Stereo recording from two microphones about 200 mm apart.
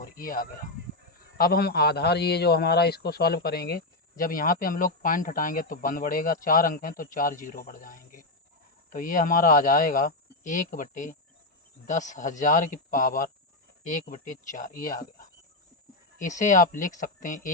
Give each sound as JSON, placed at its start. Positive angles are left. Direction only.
{"t": 0.2, "sound": "a man's voice", "side_deg": 45}